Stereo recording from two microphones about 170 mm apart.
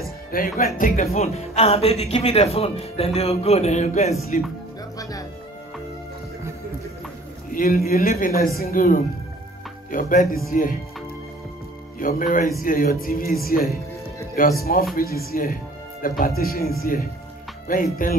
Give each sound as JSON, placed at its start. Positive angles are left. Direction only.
{"t": 0.3, "sound": "speech", "side_deg": 55}
{"t": 7.5, "sound": "speech", "side_deg": 55}
{"t": 12.0, "sound": "speech", "side_deg": 55}
{"t": 18.0, "sound": "speech", "side_deg": 55}